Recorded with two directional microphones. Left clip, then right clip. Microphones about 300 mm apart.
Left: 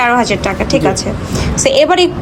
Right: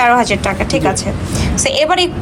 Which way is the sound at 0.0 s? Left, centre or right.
Centre.